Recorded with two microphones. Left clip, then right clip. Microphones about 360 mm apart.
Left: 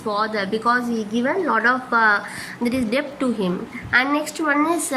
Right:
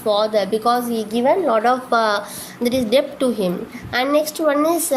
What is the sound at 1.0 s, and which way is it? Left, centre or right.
Speech, right.